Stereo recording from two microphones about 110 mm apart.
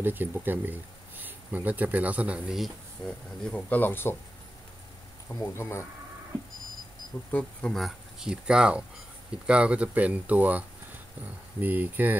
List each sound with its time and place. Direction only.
0.0 s speech: 20° right (ahead or behind)
2.6 s speech: 5° left (ahead or behind)
5.3 s speech: 25° left (ahead or behind)
7.2 s speech: 15° left (ahead or behind)
7.7 s speech: centre (ahead or behind)
11.6 s speech: 15° right (ahead or behind)